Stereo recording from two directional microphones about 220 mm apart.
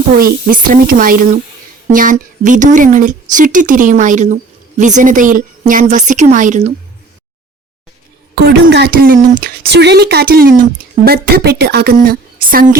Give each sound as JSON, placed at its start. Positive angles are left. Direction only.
{"t": 0.2, "sound": "speech", "side_deg": -40}
{"t": 8.4, "sound": "speech", "side_deg": -45}